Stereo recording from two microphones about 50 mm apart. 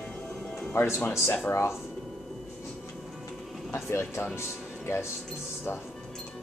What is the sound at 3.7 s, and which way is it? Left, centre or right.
Speech, left.